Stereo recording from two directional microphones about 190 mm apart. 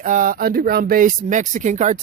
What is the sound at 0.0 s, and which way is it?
Speech, 45° right (ahead or behind).